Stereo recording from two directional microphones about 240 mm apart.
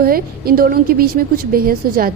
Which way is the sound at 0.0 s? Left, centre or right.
Right.